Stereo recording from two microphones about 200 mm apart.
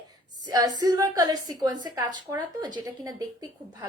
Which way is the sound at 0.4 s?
20° right (ahead or behind).